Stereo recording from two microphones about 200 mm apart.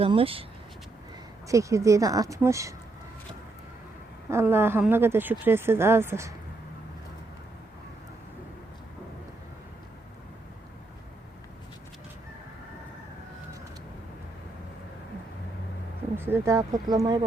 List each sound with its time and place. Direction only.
0.0 s speech: 25° right (ahead or behind)
1.5 s speech: 15° right (ahead or behind)
4.3 s speech: 10° right (ahead or behind)
16.1 s speech: 10° right (ahead or behind)